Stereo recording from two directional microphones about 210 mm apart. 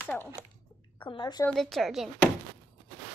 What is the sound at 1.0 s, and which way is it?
Speech, 20° left (ahead or behind).